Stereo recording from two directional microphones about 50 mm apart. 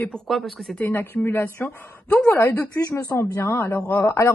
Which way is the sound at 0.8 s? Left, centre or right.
Left.